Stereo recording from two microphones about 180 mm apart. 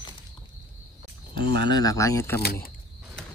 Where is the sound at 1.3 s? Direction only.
65° right (ahead or behind).